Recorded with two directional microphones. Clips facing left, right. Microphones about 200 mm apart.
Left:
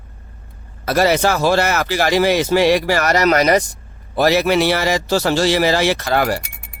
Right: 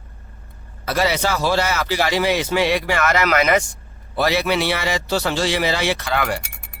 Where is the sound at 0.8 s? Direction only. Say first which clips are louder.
Left 5 dB; 45° left (ahead or behind).